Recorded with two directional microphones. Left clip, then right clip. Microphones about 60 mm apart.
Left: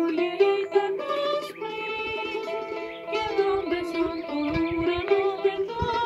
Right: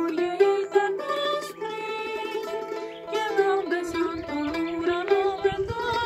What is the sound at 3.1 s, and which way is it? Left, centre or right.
Music, right.